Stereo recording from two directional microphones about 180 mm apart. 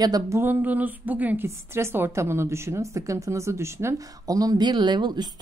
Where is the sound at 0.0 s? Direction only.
20° right (ahead or behind).